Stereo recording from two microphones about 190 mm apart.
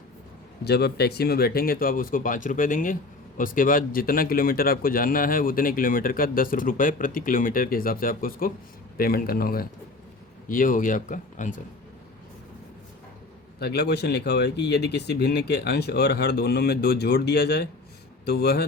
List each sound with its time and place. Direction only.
0.6 s speech: 60° left (ahead or behind); by 11.6 s 40° left (ahead or behind)
13.6 s speech: 55° left (ahead or behind)